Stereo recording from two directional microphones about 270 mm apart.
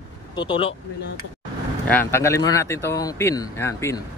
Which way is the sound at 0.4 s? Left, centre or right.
Centre.